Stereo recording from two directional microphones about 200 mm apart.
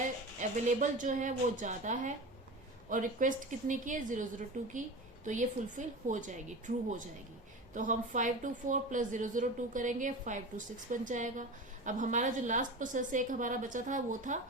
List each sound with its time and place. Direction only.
0.3 s speech: 40° right (ahead or behind)